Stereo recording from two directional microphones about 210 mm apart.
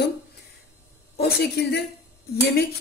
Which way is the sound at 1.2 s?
50° left (ahead or behind).